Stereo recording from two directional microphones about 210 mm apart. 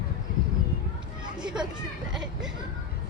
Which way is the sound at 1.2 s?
20° right (ahead or behind).